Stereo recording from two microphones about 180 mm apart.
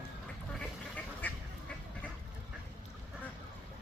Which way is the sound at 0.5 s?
5° left (ahead or behind).